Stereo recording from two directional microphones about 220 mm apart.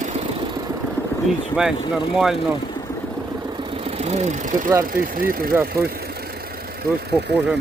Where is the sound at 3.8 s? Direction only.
25° right (ahead or behind).